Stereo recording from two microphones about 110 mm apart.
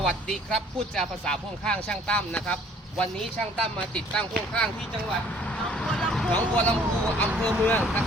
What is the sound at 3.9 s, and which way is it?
Speech, 10° left (ahead or behind).